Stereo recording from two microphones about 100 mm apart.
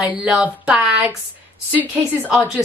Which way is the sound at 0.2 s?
10° right (ahead or behind).